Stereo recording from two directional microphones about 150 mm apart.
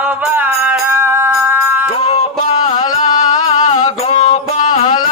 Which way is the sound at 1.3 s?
10° right (ahead or behind).